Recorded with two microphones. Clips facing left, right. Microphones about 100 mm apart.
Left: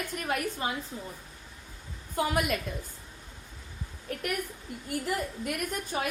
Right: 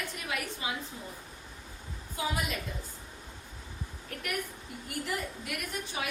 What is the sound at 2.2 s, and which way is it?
Speech, 60° left (ahead or behind).